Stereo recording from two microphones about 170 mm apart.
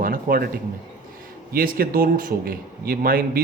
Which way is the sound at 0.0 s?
60° right (ahead or behind).